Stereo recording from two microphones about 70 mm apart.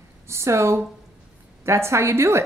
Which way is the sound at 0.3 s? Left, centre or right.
Right.